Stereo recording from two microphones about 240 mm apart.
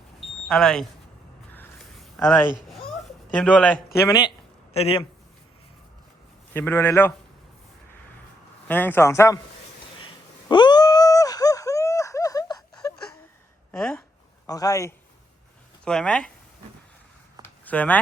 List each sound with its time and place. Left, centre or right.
0.4 s speech: centre
1.5 s a sound: centre
3.3 s speech: centre
4.7 s speech: left
6.5 s speech: centre
8.6 s speech: centre
10.5 s a sound: centre
14.4 s speech: centre
17.7 s speech: centre